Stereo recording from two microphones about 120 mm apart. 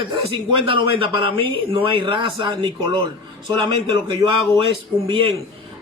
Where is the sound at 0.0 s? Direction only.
45° right (ahead or behind).